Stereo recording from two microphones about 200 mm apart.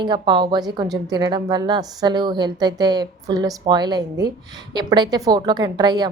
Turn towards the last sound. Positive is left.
turn(degrees=-20)  # may be behind; listen again after turning